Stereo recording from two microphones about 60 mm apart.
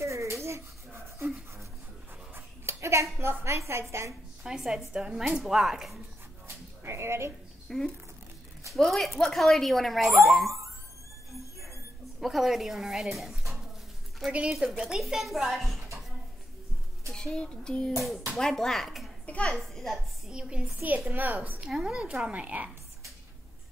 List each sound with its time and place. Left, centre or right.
0.0 s a sound: right
2.3 s a sound: right
4.4 s a woman's voice: centre
6.4 s a sound: right
7.7 s speech: centre
12.2 s speech: centre
14.8 s speech: centre
17.1 s a sound: centre
18.4 s speech: centre
19.2 s a child's voice: left
19.5 s a child's voice: centre
20.2 s a woman's voice: centre
21.1 s a woman's voice: right
21.5 s a woman's voice: centre